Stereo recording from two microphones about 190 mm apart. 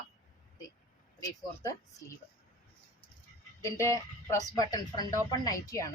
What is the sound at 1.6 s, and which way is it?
Speech, 15° left (ahead or behind).